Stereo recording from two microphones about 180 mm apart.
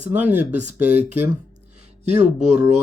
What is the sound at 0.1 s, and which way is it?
Speech, 10° right (ahead or behind).